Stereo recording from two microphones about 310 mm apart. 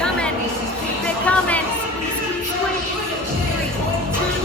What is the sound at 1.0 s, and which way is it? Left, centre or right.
Music, centre.